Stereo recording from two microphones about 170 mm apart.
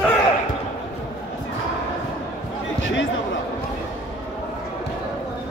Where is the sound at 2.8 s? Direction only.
90° left.